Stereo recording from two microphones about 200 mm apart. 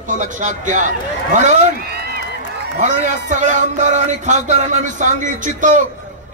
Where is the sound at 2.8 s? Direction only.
40° right (ahead or behind).